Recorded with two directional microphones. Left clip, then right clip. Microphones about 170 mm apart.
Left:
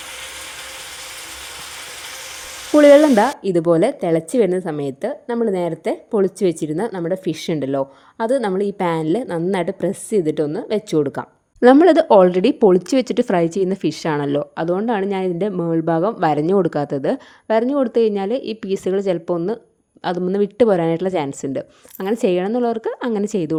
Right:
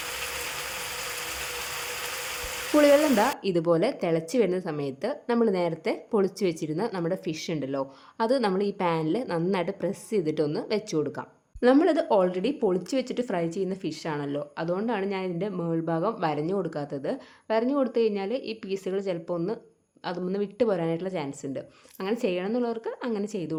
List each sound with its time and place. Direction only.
2.9 s a woman's voice: 35° left (ahead or behind)
7.3 s a woman's voice: 45° left (ahead or behind)
8.2 s a woman's voice: 30° left (ahead or behind); by 23.6 s 55° left (ahead or behind)